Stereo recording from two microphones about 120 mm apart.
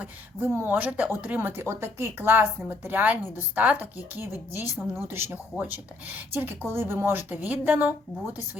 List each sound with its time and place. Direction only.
0.0 s speech: 15° right (ahead or behind)